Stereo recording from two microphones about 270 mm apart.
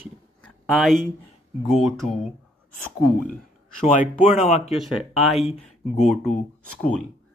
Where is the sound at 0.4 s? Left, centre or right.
Centre.